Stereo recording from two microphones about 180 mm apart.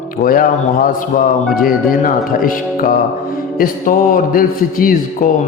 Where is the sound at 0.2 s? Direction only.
50° left (ahead or behind).